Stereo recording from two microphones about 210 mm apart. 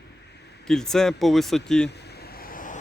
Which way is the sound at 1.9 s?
50° left (ahead or behind).